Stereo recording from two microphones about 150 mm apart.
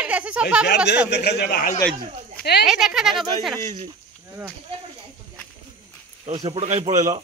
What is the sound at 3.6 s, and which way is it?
Speech, 45° right (ahead or behind).